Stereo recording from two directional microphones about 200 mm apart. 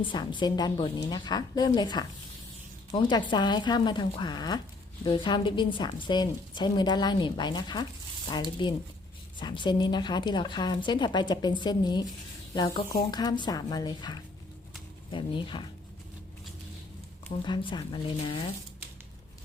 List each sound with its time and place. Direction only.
0.0 s a woman's voice: 25° left (ahead or behind)
17.4 s a woman's voice: 25° left (ahead or behind)